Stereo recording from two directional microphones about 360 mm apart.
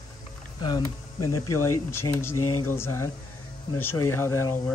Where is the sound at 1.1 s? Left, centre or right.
Left.